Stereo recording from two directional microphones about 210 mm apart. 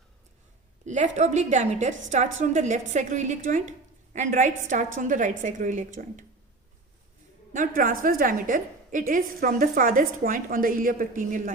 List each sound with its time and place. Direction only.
0.9 s a woman's voice: 35° right (ahead or behind)
7.5 s a woman's voice: 40° right (ahead or behind)